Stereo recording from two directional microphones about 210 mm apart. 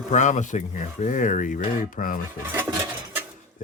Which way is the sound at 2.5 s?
10° right (ahead or behind).